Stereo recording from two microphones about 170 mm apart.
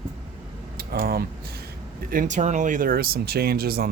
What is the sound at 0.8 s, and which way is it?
Speech, 60° right (ahead or behind).